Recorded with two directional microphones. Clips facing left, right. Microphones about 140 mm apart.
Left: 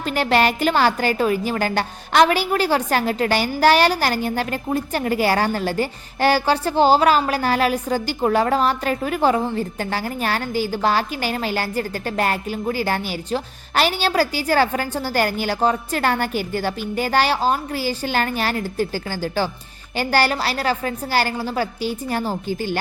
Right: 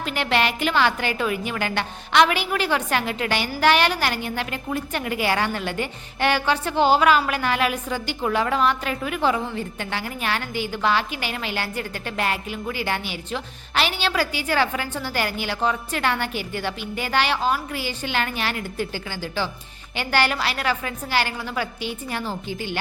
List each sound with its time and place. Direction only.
0.0 s a woman's voice: 40° left (ahead or behind)